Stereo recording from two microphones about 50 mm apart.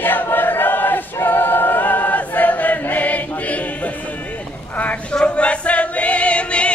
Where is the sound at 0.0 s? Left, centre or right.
Left.